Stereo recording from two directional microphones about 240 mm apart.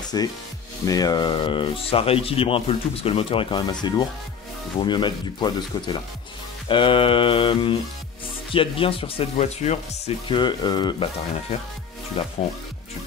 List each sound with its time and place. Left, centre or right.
0.1 s speech: centre
4.7 s speech: centre
12.4 s speech: left